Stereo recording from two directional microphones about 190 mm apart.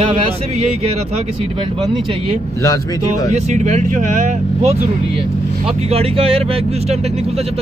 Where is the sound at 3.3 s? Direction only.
40° right (ahead or behind).